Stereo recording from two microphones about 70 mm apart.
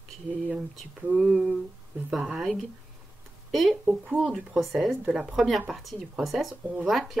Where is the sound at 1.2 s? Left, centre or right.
Centre.